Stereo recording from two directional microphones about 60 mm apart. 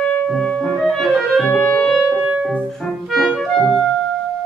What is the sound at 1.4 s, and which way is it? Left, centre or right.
Music, centre.